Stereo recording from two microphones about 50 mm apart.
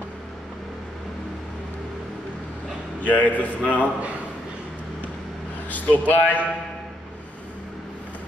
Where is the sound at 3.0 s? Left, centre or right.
Left.